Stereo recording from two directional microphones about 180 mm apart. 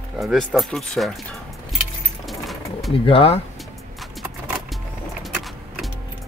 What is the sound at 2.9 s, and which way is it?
Speech, 30° left (ahead or behind).